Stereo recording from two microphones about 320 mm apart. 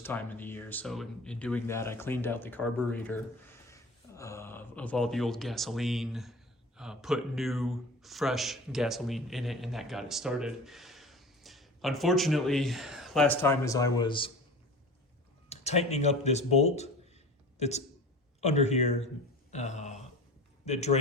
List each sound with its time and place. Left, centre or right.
0.0 s speech: centre
15.4 s speech: centre